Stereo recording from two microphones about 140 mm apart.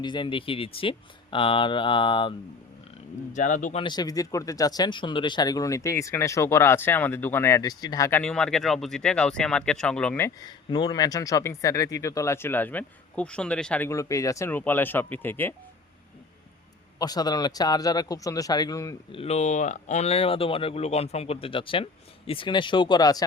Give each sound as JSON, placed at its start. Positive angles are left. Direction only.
{"t": 0.0, "sound": "speech", "side_deg": 35}
{"t": 3.3, "sound": "speech", "side_deg": 65}
{"t": 3.8, "sound": "speech", "side_deg": 30}
{"t": 8.2, "sound": "speech", "side_deg": 5}
{"t": 10.4, "sound": "speech", "side_deg": 30}
{"t": 17.0, "sound": "speech", "side_deg": 30}
{"t": 19.1, "sound": "speech", "side_deg": 45}